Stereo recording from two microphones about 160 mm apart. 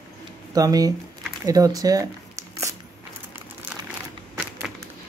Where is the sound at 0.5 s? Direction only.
25° right (ahead or behind).